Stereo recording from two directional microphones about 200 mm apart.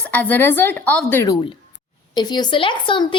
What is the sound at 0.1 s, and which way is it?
A woman's voice, 10° left (ahead or behind).